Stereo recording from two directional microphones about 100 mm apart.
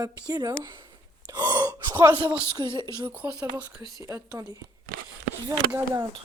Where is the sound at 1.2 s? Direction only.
45° right (ahead or behind).